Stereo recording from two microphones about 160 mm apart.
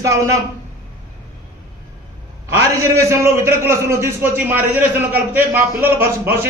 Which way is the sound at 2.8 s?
15° right (ahead or behind).